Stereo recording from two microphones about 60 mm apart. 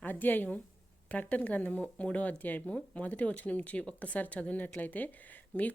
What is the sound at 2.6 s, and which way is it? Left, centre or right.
Speech, centre.